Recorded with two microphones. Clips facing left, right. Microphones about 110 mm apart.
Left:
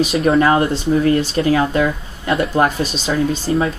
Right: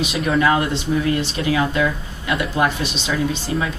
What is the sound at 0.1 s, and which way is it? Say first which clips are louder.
Speech: left 1 dB; 35° left (ahead or behind).